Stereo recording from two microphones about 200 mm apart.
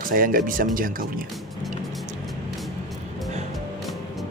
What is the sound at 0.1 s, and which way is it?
Speech, 45° right (ahead or behind).